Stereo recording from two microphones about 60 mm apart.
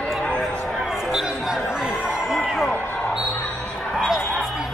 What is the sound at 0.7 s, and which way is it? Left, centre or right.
Chatter, centre.